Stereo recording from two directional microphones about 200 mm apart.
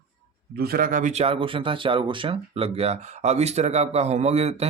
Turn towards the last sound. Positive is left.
turn(degrees=-30)  # may be behind; listen again after turning